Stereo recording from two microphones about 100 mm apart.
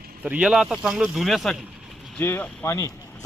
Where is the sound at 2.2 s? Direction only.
20° left (ahead or behind).